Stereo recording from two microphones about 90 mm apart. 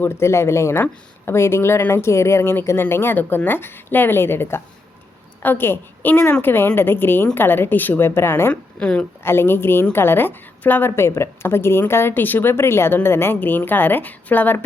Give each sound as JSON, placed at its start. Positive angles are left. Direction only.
{"t": 0.0, "sound": "a woman's voice", "side_deg": 30}
{"t": 8.8, "sound": "a woman's voice", "side_deg": 10}
{"t": 9.2, "sound": "a woman's voice", "side_deg": 25}